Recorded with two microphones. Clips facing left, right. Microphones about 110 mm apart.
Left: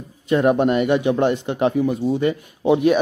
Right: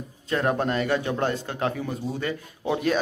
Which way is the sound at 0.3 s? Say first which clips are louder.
Left 8 dB; 20° left (ahead or behind).